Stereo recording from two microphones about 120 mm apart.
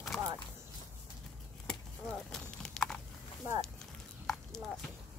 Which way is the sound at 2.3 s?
5° left (ahead or behind).